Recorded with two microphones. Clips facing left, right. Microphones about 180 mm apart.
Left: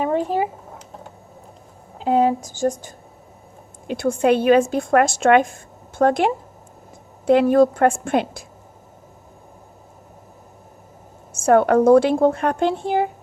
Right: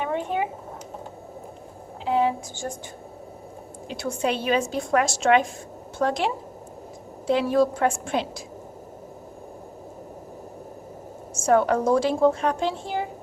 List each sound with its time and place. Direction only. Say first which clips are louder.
0.0 s a sound: left 6 dB; 35° left (ahead or behind)
2.0 s speech: left 5 dB; 45° left (ahead or behind)
3.8 s a woman's voice: left 8 dB; 55° left (ahead or behind)
11.3 s a woman's voice: left 5 dB; 60° left (ahead or behind)